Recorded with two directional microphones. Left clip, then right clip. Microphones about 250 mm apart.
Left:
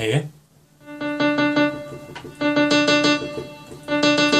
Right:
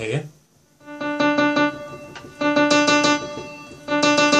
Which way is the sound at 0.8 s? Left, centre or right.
Right.